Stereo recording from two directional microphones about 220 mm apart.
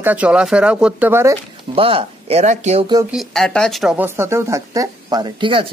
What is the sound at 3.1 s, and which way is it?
Speech, centre (ahead or behind).